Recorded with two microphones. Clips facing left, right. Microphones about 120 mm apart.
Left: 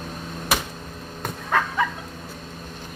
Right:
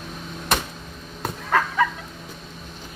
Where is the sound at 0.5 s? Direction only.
5° left (ahead or behind).